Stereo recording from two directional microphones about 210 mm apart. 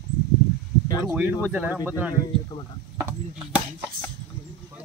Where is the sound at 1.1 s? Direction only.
10° right (ahead or behind).